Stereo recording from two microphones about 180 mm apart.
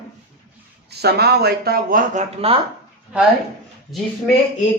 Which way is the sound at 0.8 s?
65° right (ahead or behind).